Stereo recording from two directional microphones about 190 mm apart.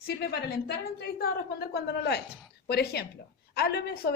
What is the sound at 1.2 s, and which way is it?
Speech, 55° left (ahead or behind).